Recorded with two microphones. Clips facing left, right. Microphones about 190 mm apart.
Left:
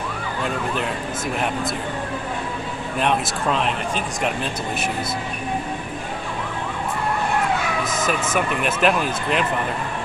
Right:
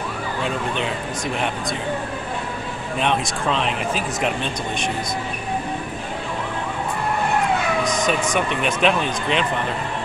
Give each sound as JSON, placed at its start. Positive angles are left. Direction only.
{"t": 3.0, "sound": "speech", "side_deg": 5}
{"t": 7.8, "sound": "speech", "side_deg": 5}